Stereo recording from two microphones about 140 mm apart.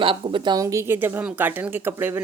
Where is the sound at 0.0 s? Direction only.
40° right (ahead or behind).